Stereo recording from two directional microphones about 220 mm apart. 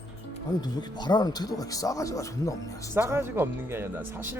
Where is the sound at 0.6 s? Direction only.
20° left (ahead or behind).